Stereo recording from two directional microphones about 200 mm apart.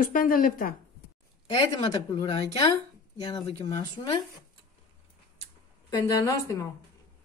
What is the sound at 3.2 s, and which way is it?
Speech, 20° left (ahead or behind).